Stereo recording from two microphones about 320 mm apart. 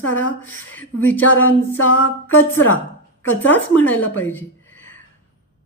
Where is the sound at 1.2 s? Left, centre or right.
Left.